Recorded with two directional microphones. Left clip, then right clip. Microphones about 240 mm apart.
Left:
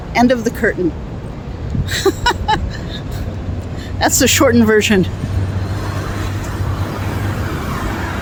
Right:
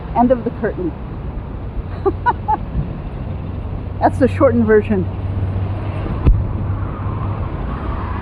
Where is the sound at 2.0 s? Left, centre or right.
Left.